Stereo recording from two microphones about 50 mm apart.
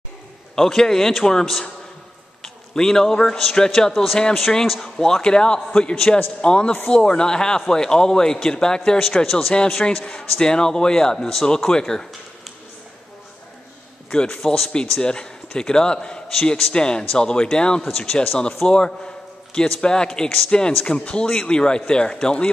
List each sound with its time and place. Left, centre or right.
0.6 s a man's voice: centre
14.1 s a man's voice: centre
14.4 s speech: centre
14.7 s a man's voice: centre